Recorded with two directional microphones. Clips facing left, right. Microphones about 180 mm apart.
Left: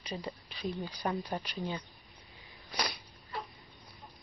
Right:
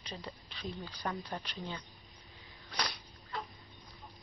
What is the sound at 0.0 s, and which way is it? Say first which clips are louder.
Speech: left 5 dB; 10° left (ahead or behind).